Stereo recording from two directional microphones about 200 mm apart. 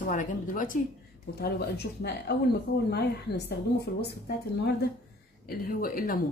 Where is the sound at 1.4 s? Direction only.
55° left (ahead or behind).